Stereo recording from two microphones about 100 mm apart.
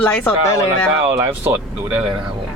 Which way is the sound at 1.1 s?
25° right (ahead or behind).